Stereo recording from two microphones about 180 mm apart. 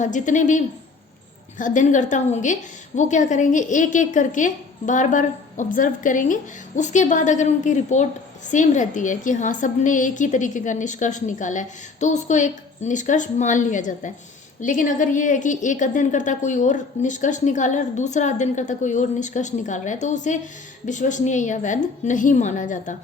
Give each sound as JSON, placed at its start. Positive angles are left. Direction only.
{"t": 0.0, "sound": "a woman's voice", "side_deg": 45}